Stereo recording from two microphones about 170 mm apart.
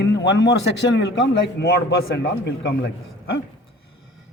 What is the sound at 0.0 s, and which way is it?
A man's voice, 85° left.